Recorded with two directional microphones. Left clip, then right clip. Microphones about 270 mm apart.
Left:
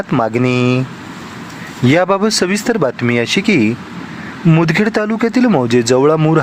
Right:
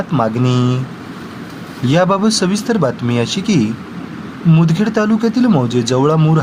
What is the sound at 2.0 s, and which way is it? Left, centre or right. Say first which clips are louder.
Speech: right 1 dB; left.